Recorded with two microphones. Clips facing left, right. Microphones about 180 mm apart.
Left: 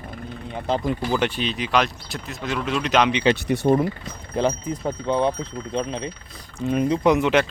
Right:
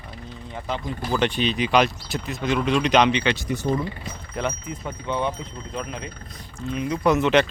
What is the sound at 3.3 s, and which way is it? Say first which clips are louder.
Speech: left 5 dB; 60° left (ahead or behind).